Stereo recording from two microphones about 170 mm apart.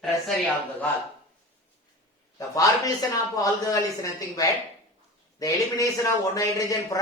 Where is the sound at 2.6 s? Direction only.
20° left (ahead or behind).